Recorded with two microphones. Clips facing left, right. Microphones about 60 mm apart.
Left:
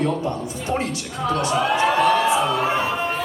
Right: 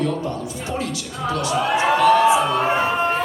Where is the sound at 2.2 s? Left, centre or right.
Centre.